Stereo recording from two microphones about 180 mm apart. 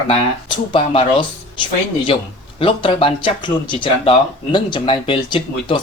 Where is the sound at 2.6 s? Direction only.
30° left (ahead or behind).